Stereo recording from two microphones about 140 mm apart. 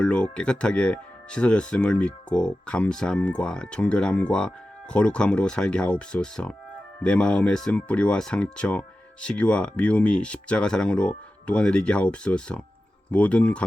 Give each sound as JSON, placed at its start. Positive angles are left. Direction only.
{"t": 0.0, "sound": "speech", "side_deg": 5}